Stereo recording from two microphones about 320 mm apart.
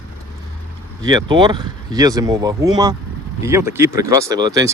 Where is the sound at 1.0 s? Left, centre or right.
Centre.